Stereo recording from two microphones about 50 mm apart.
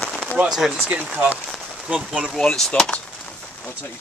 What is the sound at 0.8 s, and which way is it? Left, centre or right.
Speech, right.